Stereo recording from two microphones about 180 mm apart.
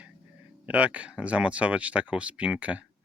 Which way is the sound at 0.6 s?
10° right (ahead or behind).